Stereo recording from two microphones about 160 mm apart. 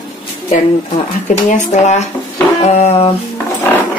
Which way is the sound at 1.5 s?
50° left (ahead or behind).